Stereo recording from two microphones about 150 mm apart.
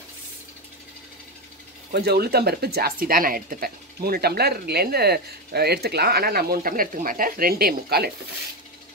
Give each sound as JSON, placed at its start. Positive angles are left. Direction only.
{"t": 1.9, "sound": "speech", "side_deg": -90}